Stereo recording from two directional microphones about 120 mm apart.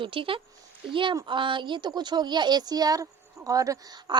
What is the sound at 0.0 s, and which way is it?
Speech, 45° right (ahead or behind).